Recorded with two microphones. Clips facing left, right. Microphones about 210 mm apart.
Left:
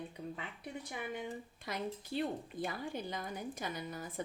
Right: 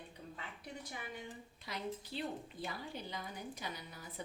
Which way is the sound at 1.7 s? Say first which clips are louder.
Left 3 dB; 50° left (ahead or behind).